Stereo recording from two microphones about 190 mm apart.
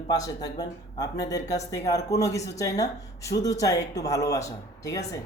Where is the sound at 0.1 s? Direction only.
20° left (ahead or behind).